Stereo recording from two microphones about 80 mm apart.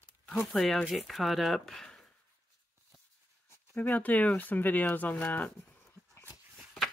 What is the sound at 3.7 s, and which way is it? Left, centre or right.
Speech, centre.